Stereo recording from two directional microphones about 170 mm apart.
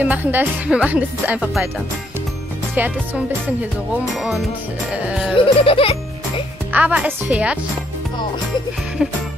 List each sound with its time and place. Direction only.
0.0 s speech: 10° right (ahead or behind)
2.7 s speech: 10° right (ahead or behind)
4.0 s music: centre (ahead or behind)
4.9 s speech: 5° right (ahead or behind)
5.3 s music: 30° left (ahead or behind)
6.7 s speech: 10° right (ahead or behind)